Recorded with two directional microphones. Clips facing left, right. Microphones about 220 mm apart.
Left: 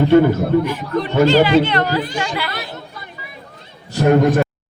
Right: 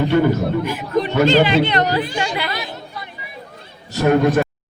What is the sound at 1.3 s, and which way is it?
Speech, 20° right (ahead or behind).